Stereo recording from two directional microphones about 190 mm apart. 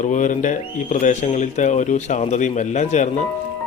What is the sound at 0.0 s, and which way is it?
Speech, 40° left (ahead or behind).